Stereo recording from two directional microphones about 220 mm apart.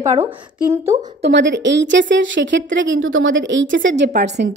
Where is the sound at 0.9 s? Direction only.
30° right (ahead or behind).